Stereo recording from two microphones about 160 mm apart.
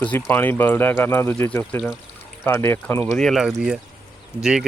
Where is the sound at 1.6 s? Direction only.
Centre (ahead or behind).